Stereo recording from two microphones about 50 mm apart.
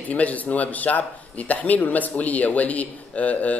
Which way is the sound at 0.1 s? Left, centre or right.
Left.